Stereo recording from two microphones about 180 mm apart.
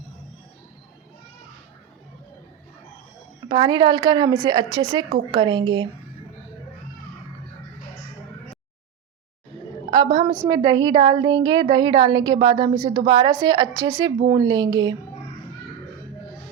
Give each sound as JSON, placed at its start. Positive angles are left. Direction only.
{"t": 3.5, "sound": "a woman's voice", "side_deg": -25}
{"t": 9.9, "sound": "a woman's voice", "side_deg": -25}